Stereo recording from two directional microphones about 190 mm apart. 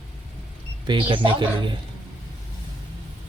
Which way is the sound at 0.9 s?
25° right (ahead or behind).